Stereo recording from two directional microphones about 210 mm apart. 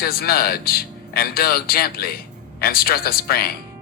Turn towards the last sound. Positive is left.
turn(degrees=45)  # may be behind; listen again after turning